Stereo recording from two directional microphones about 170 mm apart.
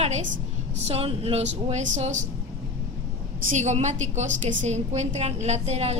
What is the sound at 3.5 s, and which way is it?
A woman's voice, 45° right (ahead or behind).